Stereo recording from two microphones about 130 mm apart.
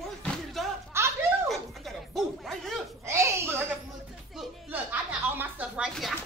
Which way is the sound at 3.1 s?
20° right (ahead or behind).